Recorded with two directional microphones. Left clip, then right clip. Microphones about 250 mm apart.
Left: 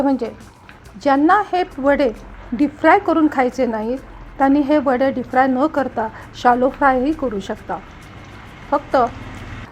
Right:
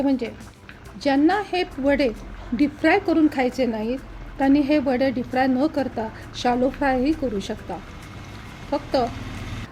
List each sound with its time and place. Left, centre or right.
0.0 s speech: centre